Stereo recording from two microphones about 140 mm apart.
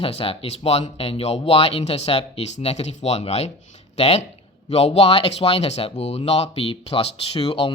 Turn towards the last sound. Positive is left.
turn(degrees=40)  # may be behind; listen again after turning